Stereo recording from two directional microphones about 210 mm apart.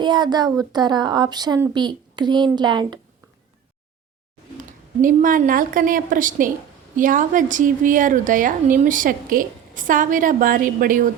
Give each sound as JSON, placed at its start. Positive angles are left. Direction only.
{"t": 0.0, "sound": "a woman's voice", "side_deg": -20}
{"t": 5.0, "sound": "a woman's voice", "side_deg": -40}